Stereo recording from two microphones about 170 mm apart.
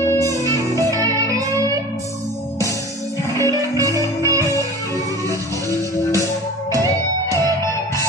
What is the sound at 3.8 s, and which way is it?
Music, 20° right (ahead or behind).